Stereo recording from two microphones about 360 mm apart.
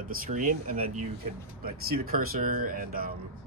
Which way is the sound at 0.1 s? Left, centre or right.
Right.